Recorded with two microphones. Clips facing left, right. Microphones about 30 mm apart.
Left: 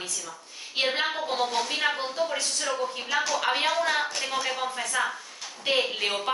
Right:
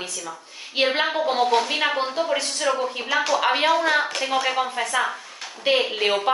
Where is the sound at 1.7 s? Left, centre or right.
Right.